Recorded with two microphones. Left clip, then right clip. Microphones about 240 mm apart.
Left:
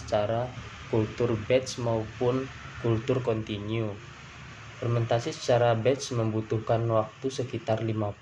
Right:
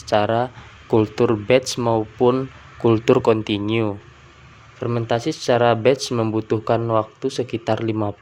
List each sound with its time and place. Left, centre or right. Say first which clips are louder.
0.0 s speech: right 9 dB; right
5.0 s speech: right 6 dB; right